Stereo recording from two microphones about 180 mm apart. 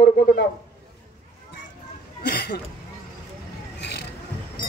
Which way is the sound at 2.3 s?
60° left (ahead or behind).